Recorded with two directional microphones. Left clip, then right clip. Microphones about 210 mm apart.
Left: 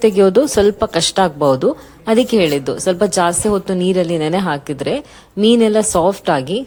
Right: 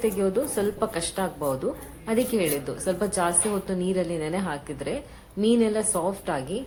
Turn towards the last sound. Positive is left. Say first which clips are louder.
# left 13 dB
turn(degrees=40)  # may be behind; listen again after turning